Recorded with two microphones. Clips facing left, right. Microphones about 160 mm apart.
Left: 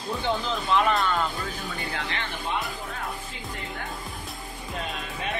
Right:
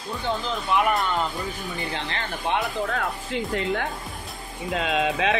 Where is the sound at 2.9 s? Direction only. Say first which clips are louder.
Right 8 dB; 90° right.